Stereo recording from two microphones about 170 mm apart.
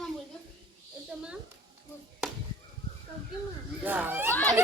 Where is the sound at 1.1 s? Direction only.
5° right (ahead or behind).